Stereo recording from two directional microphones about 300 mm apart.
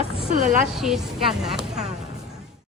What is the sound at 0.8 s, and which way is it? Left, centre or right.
Speech, centre.